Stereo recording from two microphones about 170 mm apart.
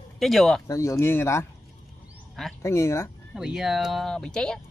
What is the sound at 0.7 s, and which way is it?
Speech, 15° left (ahead or behind).